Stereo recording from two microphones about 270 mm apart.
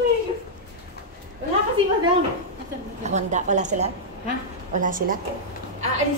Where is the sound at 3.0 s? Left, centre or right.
Right.